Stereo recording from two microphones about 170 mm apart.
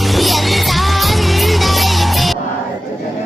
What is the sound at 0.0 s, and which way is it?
Music, centre (ahead or behind).